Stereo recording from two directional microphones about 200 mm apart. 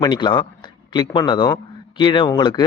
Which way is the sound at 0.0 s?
20° left (ahead or behind).